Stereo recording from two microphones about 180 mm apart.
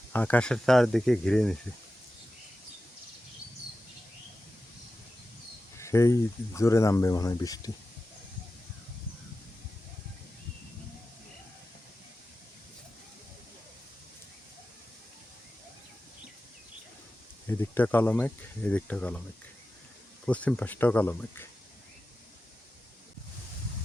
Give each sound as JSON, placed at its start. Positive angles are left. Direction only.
{"t": 0.1, "sound": "speech", "side_deg": 10}
{"t": 5.7, "sound": "speech", "side_deg": 15}
{"t": 17.4, "sound": "speech", "side_deg": 10}
{"t": 20.2, "sound": "speech", "side_deg": 5}